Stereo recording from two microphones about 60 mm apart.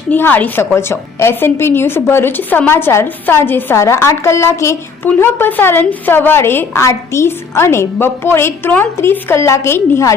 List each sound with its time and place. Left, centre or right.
0.1 s a woman's voice: left
0.7 s a woman's voice: left
3.8 s a woman's voice: left
5.2 s a woman's voice: left
6.1 s a woman's voice: left
6.8 s a woman's voice: left